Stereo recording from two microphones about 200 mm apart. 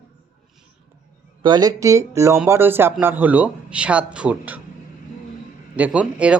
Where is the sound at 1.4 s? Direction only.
20° right (ahead or behind).